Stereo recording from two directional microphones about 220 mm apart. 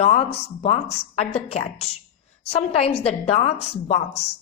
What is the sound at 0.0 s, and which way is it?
A woman's voice, 30° left (ahead or behind).